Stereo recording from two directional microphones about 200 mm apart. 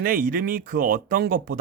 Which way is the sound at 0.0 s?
45° right (ahead or behind).